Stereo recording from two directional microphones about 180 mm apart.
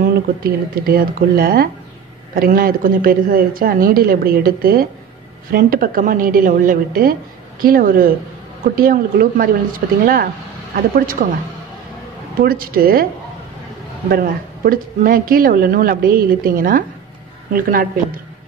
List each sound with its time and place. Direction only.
0.0 s speech: 55° right (ahead or behind)
12.4 s speech: 55° right (ahead or behind)
14.1 s speech: 55° right (ahead or behind)